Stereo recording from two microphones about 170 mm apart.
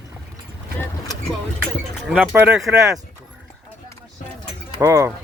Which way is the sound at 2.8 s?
20° right (ahead or behind).